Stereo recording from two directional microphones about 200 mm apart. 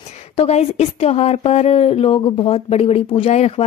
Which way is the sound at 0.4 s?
30° left (ahead or behind).